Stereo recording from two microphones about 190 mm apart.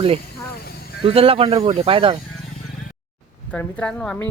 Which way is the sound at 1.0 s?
30° right (ahead or behind).